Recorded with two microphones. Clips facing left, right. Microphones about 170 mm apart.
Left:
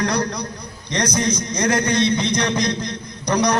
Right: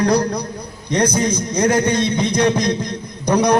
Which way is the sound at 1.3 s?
5° right (ahead or behind).